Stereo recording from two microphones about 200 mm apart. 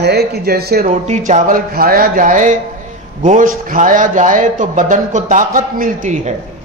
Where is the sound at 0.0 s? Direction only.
55° right (ahead or behind).